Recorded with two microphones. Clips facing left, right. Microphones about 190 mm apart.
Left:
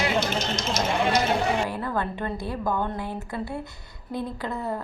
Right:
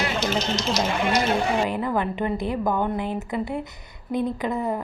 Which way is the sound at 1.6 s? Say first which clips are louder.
Right 4 dB; 15° right (ahead or behind).